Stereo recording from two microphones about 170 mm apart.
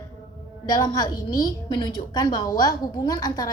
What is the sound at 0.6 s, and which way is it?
A woman's voice, 25° left (ahead or behind).